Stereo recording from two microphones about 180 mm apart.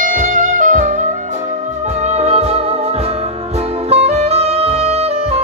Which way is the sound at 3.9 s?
35° right (ahead or behind).